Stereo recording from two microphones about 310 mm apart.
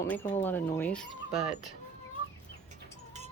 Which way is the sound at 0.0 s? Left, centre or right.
Centre.